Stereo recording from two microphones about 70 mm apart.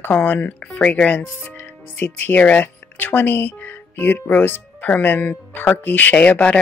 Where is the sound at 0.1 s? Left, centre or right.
Left.